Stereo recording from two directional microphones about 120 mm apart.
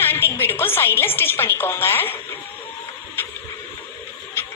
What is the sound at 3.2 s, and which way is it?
Printer, 20° left (ahead or behind).